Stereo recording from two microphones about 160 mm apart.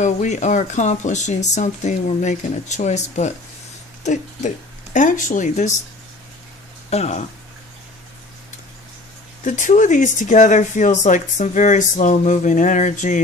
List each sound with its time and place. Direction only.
0.0 s speech: 50° left (ahead or behind)
4.0 s a sound: 50° left (ahead or behind)
4.9 s speech: 55° left (ahead or behind)
6.9 s speech: 45° left (ahead or behind)
9.4 s speech: 50° left (ahead or behind)